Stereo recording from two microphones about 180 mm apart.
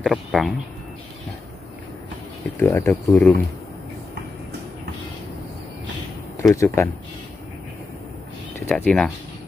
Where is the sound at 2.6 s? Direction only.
15° left (ahead or behind).